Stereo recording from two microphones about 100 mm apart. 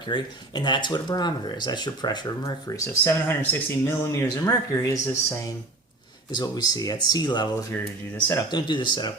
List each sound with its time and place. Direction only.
0.1 s speech: 45° left (ahead or behind)
3.0 s speech: 20° left (ahead or behind)
6.3 s speech: 45° left (ahead or behind)
7.7 s speech: 20° left (ahead or behind)
8.4 s speech: 50° left (ahead or behind)